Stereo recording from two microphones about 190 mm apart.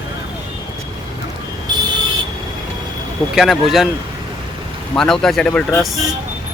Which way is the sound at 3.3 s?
Centre (ahead or behind).